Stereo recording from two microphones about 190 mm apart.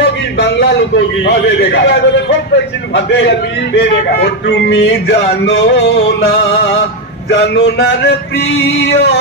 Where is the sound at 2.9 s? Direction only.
65° left (ahead or behind).